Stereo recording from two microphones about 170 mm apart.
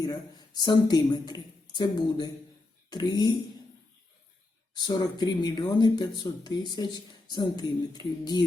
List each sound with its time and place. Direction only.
0.0 s speech: 25° left (ahead or behind)
4.7 s speech: 25° left (ahead or behind)